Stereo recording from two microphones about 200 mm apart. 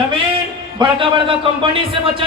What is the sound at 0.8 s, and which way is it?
A man's voice, 25° right (ahead or behind).